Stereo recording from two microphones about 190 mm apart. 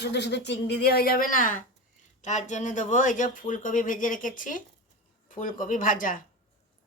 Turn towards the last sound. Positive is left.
turn(degrees=45)  # may be behind; listen again after turning